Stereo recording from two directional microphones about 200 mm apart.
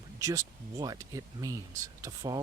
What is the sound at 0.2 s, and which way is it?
Speech, 15° right (ahead or behind).